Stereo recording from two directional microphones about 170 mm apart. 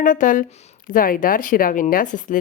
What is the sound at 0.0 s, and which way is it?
Speech, 50° left (ahead or behind).